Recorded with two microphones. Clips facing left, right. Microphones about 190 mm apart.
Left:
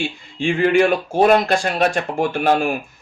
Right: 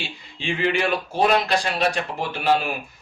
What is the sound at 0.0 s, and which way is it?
Speech, 50° left (ahead or behind).